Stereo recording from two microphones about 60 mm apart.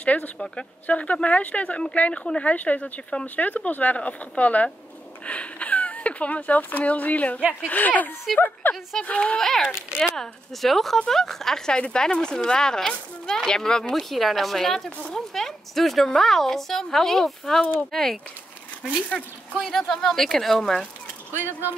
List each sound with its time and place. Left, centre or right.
0.0 s speech: left
9.4 s speech: centre
9.8 s speech: centre
10.1 s a woman's voice: centre
14.9 s speech: left
15.1 s a woman's voice: centre
18.9 s speech: centre
19.6 s a woman's voice: centre
21.3 s speech: right